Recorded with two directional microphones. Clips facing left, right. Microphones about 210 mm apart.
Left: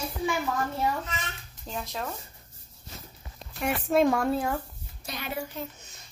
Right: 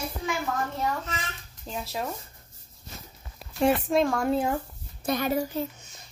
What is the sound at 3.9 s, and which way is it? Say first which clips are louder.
Speech: left 1 dB; 5° left (ahead or behind).